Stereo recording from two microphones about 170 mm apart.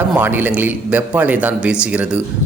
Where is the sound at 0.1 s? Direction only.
10° right (ahead or behind).